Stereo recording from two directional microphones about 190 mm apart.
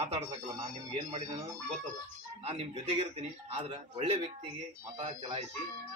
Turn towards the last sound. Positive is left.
turn(degrees=-25)  # may be behind; listen again after turning